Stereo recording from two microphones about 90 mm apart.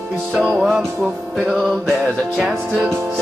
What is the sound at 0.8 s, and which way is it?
Music, 30° right (ahead or behind).